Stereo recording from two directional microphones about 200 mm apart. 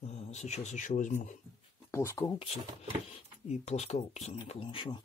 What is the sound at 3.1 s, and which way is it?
Speech, 35° left (ahead or behind).